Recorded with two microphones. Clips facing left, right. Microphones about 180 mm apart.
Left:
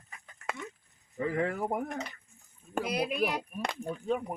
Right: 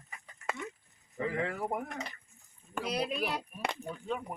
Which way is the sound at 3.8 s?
45° left (ahead or behind).